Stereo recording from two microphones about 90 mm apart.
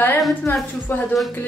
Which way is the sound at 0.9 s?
25° left (ahead or behind).